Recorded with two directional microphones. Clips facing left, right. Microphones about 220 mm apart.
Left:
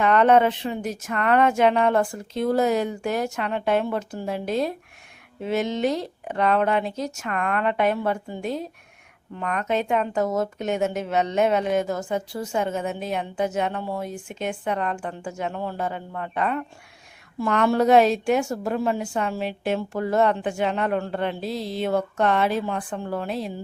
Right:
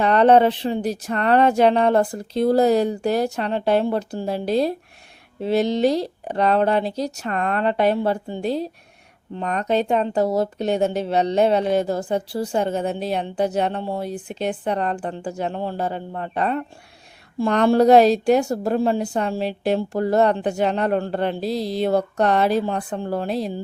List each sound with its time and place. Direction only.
0.0 s speech: 35° right (ahead or behind)